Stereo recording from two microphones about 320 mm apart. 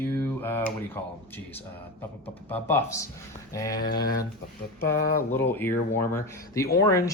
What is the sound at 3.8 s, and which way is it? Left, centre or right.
Speech, left.